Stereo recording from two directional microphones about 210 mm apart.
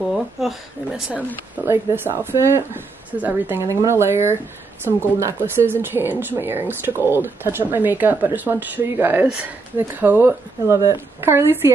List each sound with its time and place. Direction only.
0.1 s speech: centre (ahead or behind)